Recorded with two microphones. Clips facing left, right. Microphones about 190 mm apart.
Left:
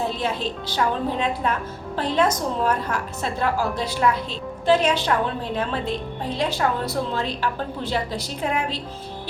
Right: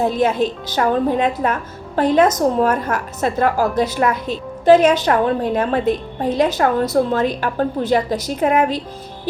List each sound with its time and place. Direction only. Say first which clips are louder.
0.0 s a woman's voice: right 8 dB; 45° right (ahead or behind)